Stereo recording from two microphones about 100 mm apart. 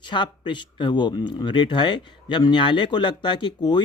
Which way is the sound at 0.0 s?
50° left (ahead or behind).